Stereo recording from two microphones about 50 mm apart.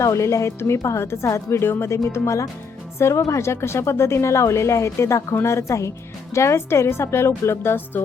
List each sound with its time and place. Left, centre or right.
0.0 s a woman's voice: left
3.0 s a woman's voice: left
6.3 s speech: left